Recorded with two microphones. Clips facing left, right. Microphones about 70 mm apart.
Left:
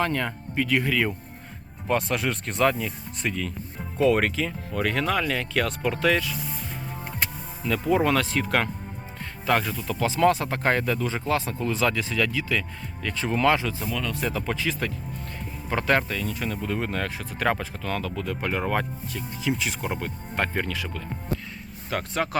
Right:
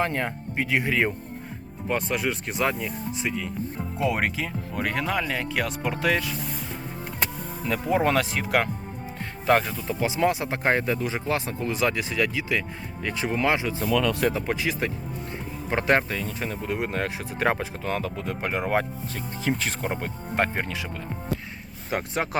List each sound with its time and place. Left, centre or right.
0.0 s speech: right
1.9 s speech: centre; by 6.3 s right
7.7 s speech: right
9.5 s speech: right
19.1 s speech: right
19.9 s speech: right
21.8 s speech: right